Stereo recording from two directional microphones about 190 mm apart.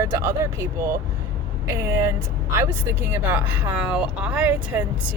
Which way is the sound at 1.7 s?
15° right (ahead or behind).